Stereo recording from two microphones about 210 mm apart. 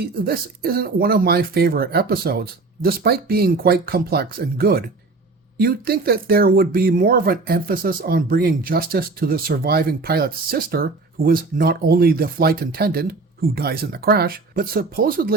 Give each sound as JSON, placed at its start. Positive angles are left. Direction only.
{"t": 0.0, "sound": "speech", "side_deg": -45}